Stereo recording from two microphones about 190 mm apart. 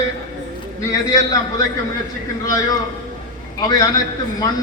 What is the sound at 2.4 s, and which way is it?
A man's voice, 20° left (ahead or behind).